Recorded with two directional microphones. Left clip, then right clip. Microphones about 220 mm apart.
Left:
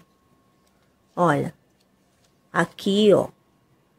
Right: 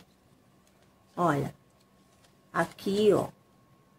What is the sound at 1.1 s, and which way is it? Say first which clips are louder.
Speech: left 7 dB; 40° left (ahead or behind).